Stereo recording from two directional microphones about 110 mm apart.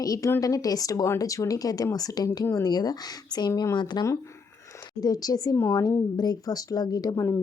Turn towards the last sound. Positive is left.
turn(degrees=35)  # may be behind; listen again after turning